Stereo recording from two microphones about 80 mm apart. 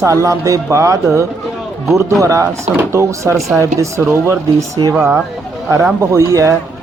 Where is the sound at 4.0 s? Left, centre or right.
Right.